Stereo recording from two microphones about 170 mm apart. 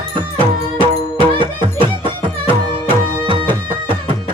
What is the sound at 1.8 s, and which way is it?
Music, 30° right (ahead or behind).